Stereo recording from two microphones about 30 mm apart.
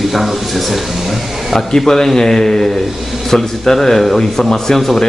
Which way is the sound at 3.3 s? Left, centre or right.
Centre.